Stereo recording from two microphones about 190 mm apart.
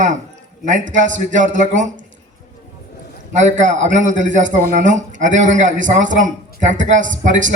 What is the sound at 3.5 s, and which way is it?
A man's voice, 40° right (ahead or behind).